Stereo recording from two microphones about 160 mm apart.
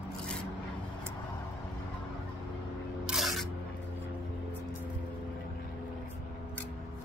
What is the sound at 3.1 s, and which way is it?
Music, centre (ahead or behind).